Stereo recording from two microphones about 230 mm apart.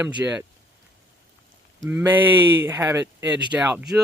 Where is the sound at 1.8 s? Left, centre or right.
Centre.